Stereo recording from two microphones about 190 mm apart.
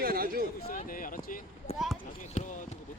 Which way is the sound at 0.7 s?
45° left (ahead or behind).